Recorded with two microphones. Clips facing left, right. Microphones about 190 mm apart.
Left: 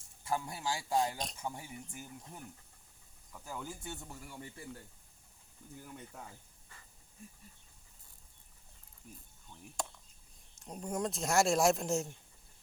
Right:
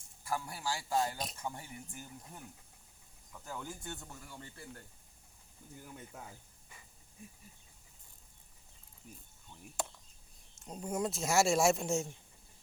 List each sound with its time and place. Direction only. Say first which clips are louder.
0.3 s a man's voice: left 1 dB; 20° left (ahead or behind)
3.3 s speech: even; 5° left (ahead or behind)
5.6 s speech: left 1 dB; centre (ahead or behind)
10.6 s speech: right 1 dB; centre (ahead or behind)